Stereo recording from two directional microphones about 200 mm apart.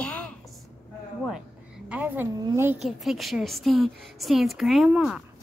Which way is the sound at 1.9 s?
10° right (ahead or behind).